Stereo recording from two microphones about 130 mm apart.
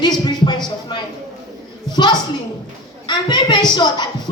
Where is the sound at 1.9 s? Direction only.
35° left (ahead or behind).